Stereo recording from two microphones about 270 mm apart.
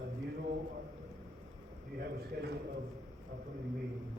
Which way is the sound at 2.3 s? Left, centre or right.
Right.